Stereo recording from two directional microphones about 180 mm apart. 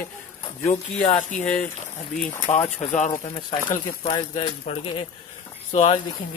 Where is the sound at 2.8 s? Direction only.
40° left (ahead or behind).